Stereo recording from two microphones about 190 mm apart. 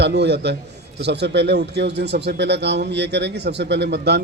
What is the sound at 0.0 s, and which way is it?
A man's voice, 60° right (ahead or behind).